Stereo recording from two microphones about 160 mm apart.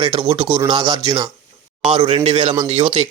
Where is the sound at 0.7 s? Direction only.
25° right (ahead or behind).